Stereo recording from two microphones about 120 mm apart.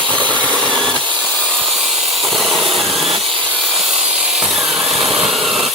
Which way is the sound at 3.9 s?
60° right (ahead or behind).